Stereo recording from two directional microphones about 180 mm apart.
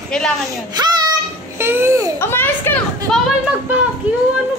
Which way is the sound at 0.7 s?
25° right (ahead or behind).